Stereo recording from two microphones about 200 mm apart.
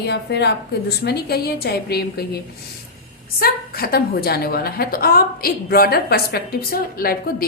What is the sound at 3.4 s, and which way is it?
A woman's voice, 50° left (ahead or behind).